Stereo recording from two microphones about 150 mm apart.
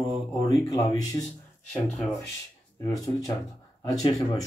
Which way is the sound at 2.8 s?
20° left (ahead or behind).